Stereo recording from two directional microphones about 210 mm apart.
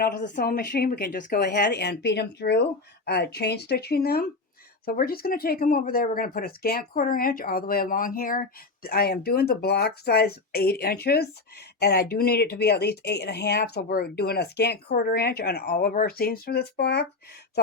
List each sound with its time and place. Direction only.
0.0 s speech: 40° left (ahead or behind)